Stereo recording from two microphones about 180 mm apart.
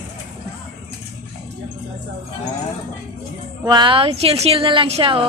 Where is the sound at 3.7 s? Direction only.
25° right (ahead or behind).